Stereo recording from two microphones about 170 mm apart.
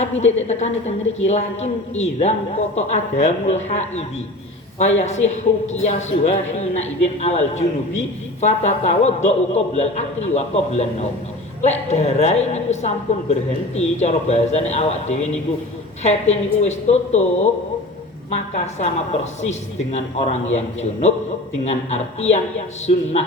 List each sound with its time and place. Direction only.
0.0 s a woman's voice: 40° left (ahead or behind)
18.3 s a woman's voice: 40° left (ahead or behind)